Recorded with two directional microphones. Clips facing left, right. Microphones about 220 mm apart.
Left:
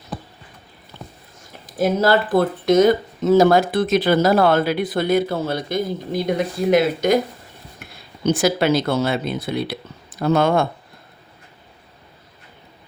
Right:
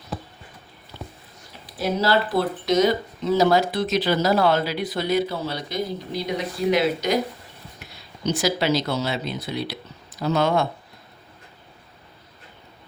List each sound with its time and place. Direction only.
1.6 s speech: 50° left (ahead or behind)